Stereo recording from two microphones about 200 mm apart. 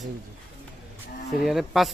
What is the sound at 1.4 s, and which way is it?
Speech, centre (ahead or behind).